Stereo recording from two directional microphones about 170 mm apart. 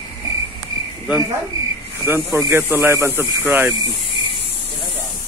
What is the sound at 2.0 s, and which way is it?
Speech, 15° right (ahead or behind).